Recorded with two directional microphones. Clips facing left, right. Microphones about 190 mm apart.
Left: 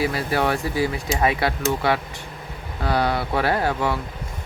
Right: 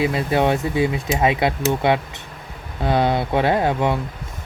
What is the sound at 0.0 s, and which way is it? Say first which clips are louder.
Speech: right 3 dB; 20° right (ahead or behind).